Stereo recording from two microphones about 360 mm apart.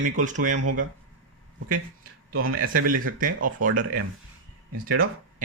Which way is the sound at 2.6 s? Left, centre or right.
Right.